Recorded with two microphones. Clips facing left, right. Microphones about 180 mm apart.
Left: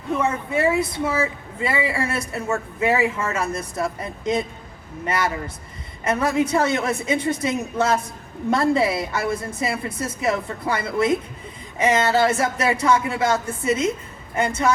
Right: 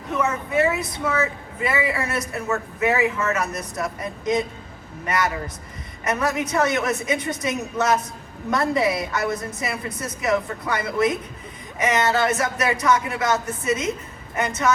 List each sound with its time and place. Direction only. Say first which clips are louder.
0.2 s a woman's voice: right 2 dB; 30° left (ahead or behind)